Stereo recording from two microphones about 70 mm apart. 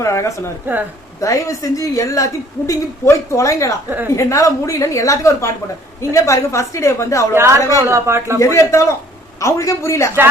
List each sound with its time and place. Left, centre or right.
0.0 s a woman's voice: left
3.8 s a woman's voice: right
4.1 s a woman's voice: left
7.9 s speech: right
8.4 s a woman's voice: left